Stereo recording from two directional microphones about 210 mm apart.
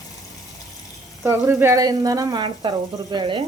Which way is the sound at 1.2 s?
10° right (ahead or behind).